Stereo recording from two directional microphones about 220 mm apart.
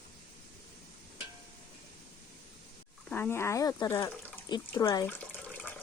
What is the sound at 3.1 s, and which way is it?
Water, 10° left (ahead or behind).